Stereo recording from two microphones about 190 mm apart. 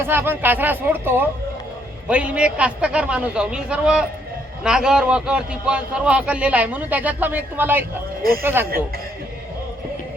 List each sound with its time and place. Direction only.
0.0 s a man's voice: 10° right (ahead or behind)
8.2 s speech: 50° right (ahead or behind)